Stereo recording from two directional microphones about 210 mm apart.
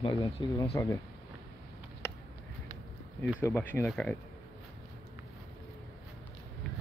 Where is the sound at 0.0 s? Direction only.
20° left (ahead or behind).